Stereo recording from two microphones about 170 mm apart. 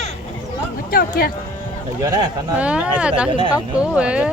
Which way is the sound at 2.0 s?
20° right (ahead or behind).